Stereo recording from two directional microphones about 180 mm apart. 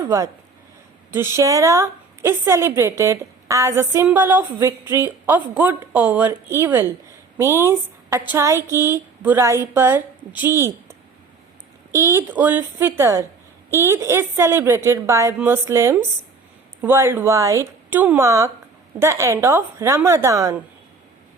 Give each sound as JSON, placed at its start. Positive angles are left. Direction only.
{"t": 0.0, "sound": "a woman's voice", "side_deg": -20}